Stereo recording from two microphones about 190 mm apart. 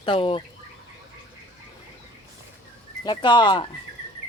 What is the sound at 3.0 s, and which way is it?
Speech, 25° left (ahead or behind).